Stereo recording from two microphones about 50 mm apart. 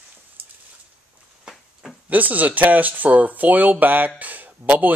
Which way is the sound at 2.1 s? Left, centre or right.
Right.